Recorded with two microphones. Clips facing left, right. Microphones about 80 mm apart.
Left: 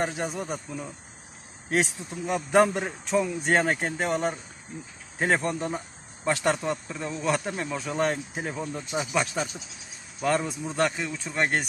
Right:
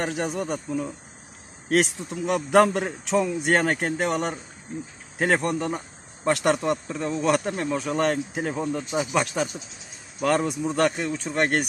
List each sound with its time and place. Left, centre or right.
0.0 s speech: right
1.7 s speech: right
10.2 s speech: right